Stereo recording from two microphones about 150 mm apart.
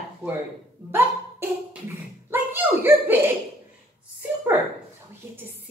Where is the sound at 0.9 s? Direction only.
15° right (ahead or behind).